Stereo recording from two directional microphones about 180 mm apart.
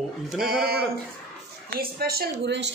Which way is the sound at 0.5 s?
55° right (ahead or behind).